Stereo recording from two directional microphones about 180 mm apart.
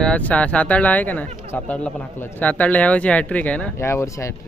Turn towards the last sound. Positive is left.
turn(degrees=15)  # may be behind; listen again after turning